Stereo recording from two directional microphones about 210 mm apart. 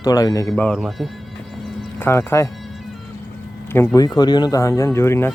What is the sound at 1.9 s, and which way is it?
Speech, 10° left (ahead or behind).